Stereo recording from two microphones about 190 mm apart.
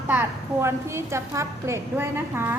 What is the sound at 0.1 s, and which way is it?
A woman's voice, 10° right (ahead or behind).